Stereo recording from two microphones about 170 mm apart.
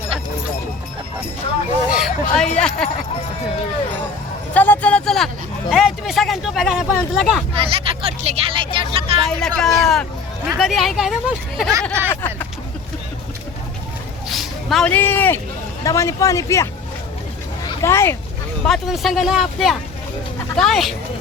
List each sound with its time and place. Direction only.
1.9 s a sound: centre (ahead or behind)
2.6 s speech: 5° left (ahead or behind)
4.5 s speech: 10° left (ahead or behind)
7.5 s speech: 35° right (ahead or behind)
9.6 s speech: centre (ahead or behind)
14.3 s speech: centre (ahead or behind); by 16.6 s 20° left (ahead or behind)
17.8 s speech: 15° left (ahead or behind)
18.6 s speech: centre (ahead or behind)